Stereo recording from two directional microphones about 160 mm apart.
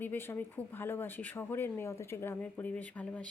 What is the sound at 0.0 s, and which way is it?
Speech, 15° left (ahead or behind).